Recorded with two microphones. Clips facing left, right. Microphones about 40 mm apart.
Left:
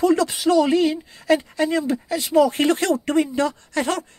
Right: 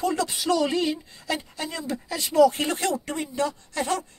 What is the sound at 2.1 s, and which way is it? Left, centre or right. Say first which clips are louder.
Speech: left 10 dB; centre.